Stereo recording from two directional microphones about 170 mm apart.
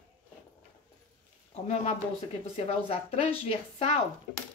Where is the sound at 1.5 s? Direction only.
40° left (ahead or behind).